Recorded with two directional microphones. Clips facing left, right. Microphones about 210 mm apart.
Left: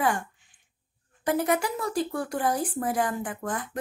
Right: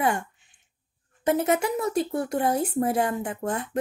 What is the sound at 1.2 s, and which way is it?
Speech, 25° right (ahead or behind).